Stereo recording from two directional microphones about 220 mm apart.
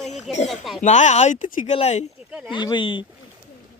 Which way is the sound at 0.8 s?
35° left (ahead or behind).